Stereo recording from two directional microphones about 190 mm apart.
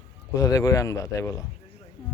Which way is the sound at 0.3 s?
20° left (ahead or behind).